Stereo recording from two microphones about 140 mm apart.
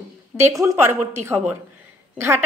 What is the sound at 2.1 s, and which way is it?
Speech, 20° right (ahead or behind).